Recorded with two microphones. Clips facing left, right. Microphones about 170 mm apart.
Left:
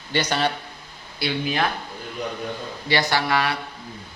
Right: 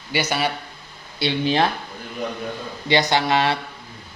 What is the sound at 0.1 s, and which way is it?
Speech, 10° right (ahead or behind).